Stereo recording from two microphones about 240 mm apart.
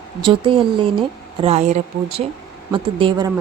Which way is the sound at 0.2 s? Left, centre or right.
Centre.